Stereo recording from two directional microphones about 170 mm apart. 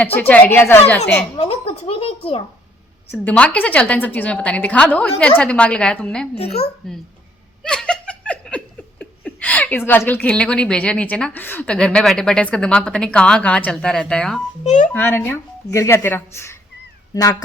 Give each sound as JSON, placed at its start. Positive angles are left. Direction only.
{"t": 0.0, "sound": "a woman's voice", "side_deg": 10}
{"t": 1.4, "sound": "a child's voice", "side_deg": 35}
{"t": 3.1, "sound": "a woman's voice", "side_deg": 10}
{"t": 7.6, "sound": "laughter", "side_deg": 5}
{"t": 14.6, "sound": "a child's voice", "side_deg": 45}
{"t": 14.9, "sound": "a woman's voice", "side_deg": 15}